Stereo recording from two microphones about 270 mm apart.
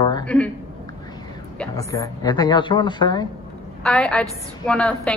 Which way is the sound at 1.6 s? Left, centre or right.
Centre.